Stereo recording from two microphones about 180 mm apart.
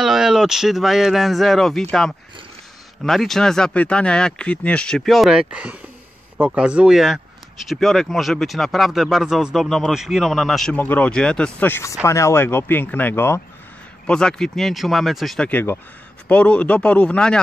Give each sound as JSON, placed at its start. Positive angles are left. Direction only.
{"t": 0.0, "sound": "speech", "side_deg": 0}